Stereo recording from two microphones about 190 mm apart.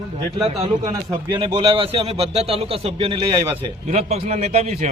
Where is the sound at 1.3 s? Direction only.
25° right (ahead or behind).